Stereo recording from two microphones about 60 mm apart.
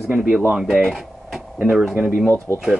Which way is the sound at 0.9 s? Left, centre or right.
Centre.